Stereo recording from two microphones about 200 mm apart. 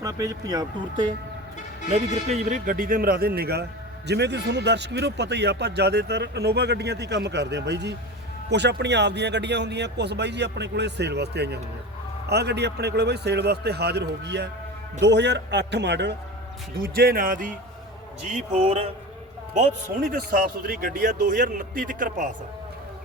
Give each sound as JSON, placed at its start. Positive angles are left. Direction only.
{"t": 0.0, "sound": "speech", "side_deg": -15}
{"t": 2.3, "sound": "a man's voice", "side_deg": -40}
{"t": 16.8, "sound": "a man's voice", "side_deg": -45}
{"t": 18.2, "sound": "a man's voice", "side_deg": -30}